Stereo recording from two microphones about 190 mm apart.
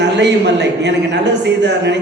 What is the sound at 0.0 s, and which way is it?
A man's voice, 65° right (ahead or behind).